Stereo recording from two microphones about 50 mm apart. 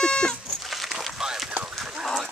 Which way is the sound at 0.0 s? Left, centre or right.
Centre.